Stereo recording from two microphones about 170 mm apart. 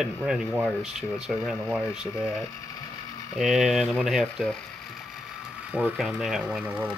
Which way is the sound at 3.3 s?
Centre (ahead or behind).